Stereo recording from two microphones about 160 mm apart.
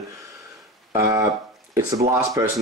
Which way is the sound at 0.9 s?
20° right (ahead or behind).